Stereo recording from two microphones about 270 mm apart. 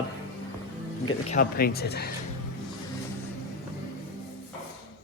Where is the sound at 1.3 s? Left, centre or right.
Left.